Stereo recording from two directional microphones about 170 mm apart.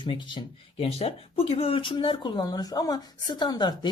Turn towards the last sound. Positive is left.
turn(degrees=25)  # may be behind; listen again after turning